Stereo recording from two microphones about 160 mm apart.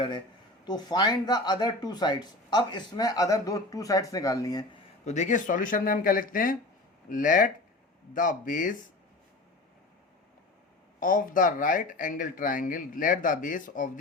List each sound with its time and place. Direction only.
0.6 s speech: 25° left (ahead or behind)
5.0 s speech: 50° left (ahead or behind)
11.0 s speech: 60° left (ahead or behind)